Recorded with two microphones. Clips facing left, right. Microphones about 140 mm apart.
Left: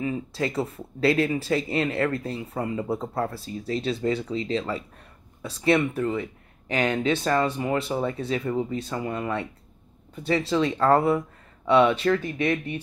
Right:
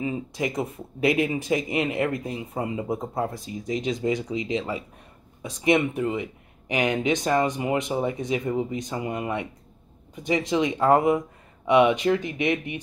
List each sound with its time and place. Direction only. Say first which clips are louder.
0.0 s speech: even; 15° right (ahead or behind)